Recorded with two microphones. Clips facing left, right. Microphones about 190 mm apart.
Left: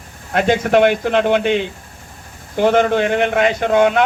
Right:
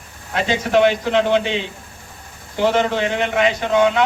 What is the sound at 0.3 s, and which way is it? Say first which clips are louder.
A man's voice: left 3 dB; 55° left (ahead or behind).